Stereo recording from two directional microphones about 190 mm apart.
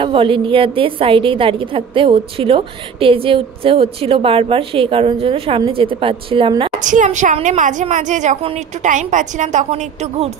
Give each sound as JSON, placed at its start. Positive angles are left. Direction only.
{"t": 0.0, "sound": "a woman's voice", "side_deg": -30}
{"t": 6.8, "sound": "a woman's voice", "side_deg": -40}